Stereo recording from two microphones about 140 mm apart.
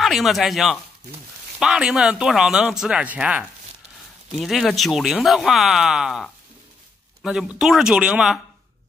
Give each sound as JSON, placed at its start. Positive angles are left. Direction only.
{"t": 0.0, "sound": "speech", "side_deg": 0}